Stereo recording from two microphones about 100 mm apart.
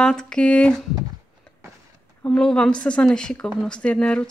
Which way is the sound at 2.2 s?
10° left (ahead or behind).